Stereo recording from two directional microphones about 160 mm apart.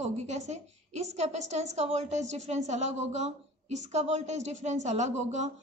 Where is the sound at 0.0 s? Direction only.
45° right (ahead or behind).